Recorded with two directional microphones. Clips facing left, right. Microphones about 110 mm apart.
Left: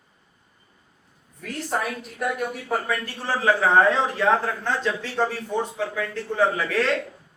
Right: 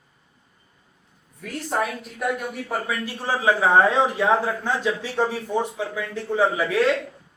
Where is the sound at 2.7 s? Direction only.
10° right (ahead or behind).